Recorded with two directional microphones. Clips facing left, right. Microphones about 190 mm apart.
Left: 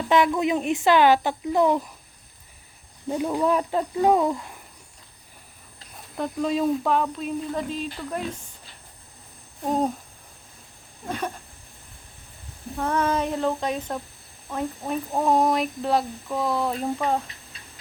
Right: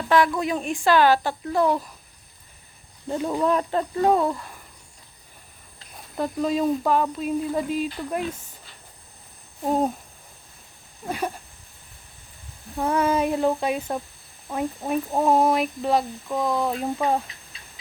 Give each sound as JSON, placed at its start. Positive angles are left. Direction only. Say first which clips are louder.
{"t": 0.1, "sound": "speech", "louder": "even", "side_deg": 20}
{"t": 3.1, "sound": "speech", "louder": "even", "side_deg": 5}
{"t": 6.1, "sound": "speech", "louder": "right 1 dB", "side_deg": 0}
{"t": 9.6, "sound": "a sound", "louder": "right 1 dB", "side_deg": -5}
{"t": 12.7, "sound": "speech", "louder": "right 2 dB", "side_deg": -10}